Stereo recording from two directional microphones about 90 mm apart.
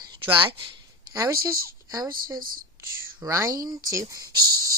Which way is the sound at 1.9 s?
45° right (ahead or behind).